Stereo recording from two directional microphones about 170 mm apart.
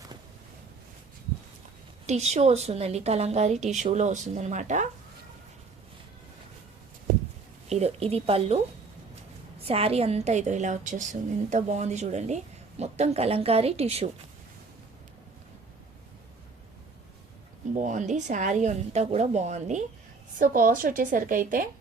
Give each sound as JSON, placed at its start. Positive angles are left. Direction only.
{"t": 2.0, "sound": "a woman's voice", "side_deg": -40}
{"t": 7.7, "sound": "a woman's voice", "side_deg": -40}
{"t": 9.6, "sound": "a woman's voice", "side_deg": -35}
{"t": 17.7, "sound": "a woman's voice", "side_deg": -45}
{"t": 20.4, "sound": "a woman's voice", "side_deg": -55}